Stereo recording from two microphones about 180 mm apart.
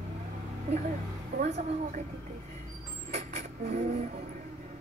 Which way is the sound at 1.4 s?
40° right (ahead or behind).